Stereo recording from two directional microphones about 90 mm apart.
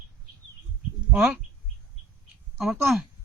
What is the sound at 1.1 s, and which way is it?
Speech, 20° right (ahead or behind).